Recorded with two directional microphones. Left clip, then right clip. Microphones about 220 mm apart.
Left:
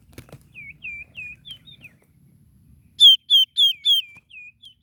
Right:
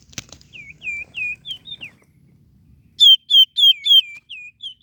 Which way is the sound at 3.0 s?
15° left (ahead or behind).